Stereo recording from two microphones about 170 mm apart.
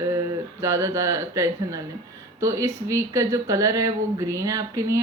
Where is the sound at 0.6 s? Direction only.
15° right (ahead or behind).